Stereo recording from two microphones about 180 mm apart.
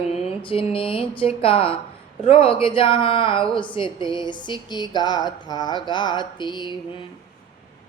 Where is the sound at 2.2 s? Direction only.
30° left (ahead or behind).